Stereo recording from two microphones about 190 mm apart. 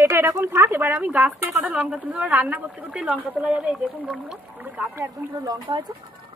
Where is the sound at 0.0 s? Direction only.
15° right (ahead or behind).